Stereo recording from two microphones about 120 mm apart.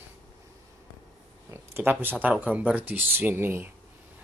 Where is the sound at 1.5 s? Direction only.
20° right (ahead or behind).